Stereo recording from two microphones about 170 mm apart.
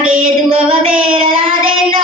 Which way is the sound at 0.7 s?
30° right (ahead or behind).